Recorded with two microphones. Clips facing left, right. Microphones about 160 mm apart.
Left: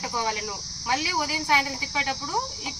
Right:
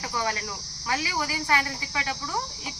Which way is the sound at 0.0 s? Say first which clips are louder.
Left 1 dB; 10° left (ahead or behind).